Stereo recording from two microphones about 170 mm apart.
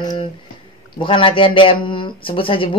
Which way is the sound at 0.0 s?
25° left (ahead or behind).